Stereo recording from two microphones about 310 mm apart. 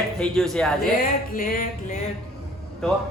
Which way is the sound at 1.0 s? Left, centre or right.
Left.